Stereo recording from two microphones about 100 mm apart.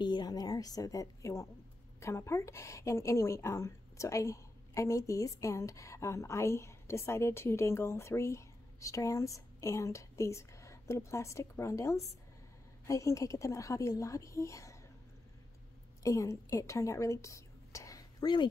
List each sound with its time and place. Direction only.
0.0 s a woman's voice: 45° left (ahead or behind)
16.0 s speech: 35° left (ahead or behind)